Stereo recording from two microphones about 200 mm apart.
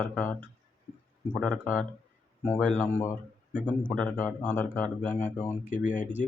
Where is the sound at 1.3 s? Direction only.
5° left (ahead or behind).